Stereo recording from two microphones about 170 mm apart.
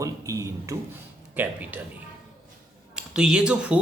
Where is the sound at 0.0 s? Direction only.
20° right (ahead or behind).